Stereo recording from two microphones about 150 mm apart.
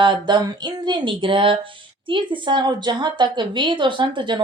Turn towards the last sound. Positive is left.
turn(degrees=-30)  # may be behind; listen again after turning